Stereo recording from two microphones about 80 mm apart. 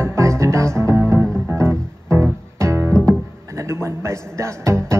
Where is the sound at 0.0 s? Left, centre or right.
Right.